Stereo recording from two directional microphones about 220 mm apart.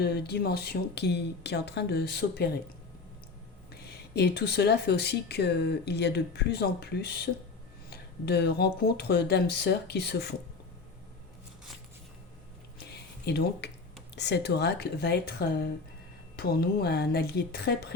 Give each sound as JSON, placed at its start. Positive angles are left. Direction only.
{"t": 0.0, "sound": "speech", "side_deg": 45}
{"t": 3.7, "sound": "speech", "side_deg": 45}
{"t": 12.8, "sound": "a sound", "side_deg": 50}
{"t": 14.2, "sound": "speech", "side_deg": 50}